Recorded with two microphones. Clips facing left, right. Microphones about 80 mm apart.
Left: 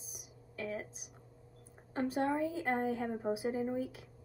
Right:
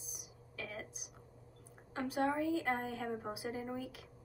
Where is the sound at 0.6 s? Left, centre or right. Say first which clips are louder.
Left 6 dB; left.